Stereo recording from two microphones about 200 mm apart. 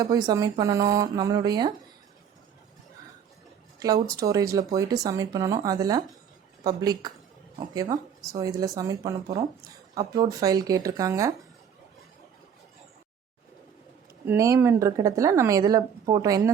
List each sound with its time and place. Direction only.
0.3 s speech: 20° right (ahead or behind)
3.8 s a woman's voice: 20° right (ahead or behind)
14.3 s speech: 15° right (ahead or behind)